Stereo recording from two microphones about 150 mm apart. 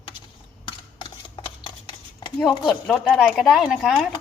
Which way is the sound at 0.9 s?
30° left (ahead or behind).